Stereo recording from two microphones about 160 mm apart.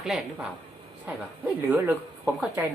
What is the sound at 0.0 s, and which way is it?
Speech, 5° right (ahead or behind).